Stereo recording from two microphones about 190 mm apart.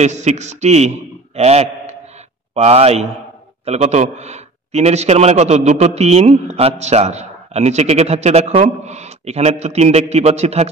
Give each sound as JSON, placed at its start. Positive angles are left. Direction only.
{"t": 0.0, "sound": "a man's voice", "side_deg": -35}